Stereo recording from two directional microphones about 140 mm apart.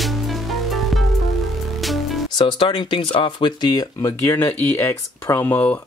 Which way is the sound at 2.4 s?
35° left (ahead or behind).